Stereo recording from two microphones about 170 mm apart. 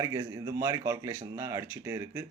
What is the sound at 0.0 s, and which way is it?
Speech, 20° right (ahead or behind).